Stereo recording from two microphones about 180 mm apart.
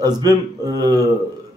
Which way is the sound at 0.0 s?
20° right (ahead or behind).